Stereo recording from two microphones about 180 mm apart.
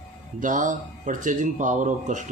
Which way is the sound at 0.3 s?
45° right (ahead or behind).